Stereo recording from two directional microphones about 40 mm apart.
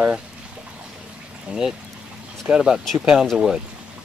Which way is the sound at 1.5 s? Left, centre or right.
Centre.